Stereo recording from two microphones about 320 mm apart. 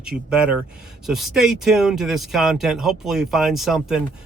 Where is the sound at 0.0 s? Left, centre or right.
Centre.